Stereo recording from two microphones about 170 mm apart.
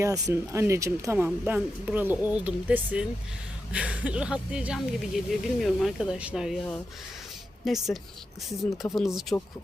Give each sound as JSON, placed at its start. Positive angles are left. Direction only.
{"t": 0.0, "sound": "speech", "side_deg": -20}
{"t": 8.9, "sound": "speech", "side_deg": 0}
{"t": 9.3, "sound": "speech", "side_deg": 15}